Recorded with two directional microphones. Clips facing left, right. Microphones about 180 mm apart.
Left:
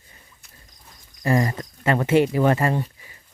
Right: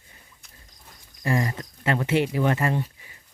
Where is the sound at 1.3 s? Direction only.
40° left (ahead or behind).